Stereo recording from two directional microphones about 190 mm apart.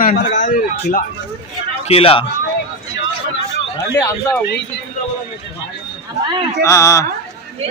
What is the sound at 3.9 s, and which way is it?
Speech, 15° left (ahead or behind).